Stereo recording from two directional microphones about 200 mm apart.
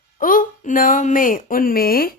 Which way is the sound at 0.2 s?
45° left (ahead or behind).